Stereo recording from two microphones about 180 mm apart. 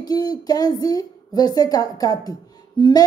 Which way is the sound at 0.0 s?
20° left (ahead or behind).